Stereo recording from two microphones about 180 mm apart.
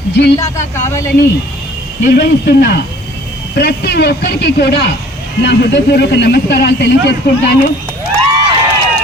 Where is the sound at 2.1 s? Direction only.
65° left (ahead or behind).